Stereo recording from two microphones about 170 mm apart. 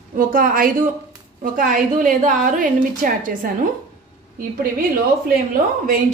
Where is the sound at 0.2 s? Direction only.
55° right (ahead or behind).